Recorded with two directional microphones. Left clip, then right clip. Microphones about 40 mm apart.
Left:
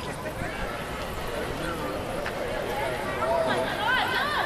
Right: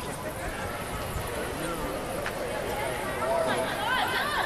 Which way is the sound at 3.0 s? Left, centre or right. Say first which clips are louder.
Left 2 dB; left.